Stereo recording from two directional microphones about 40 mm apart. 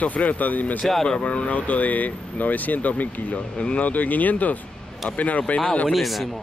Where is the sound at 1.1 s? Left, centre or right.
Left.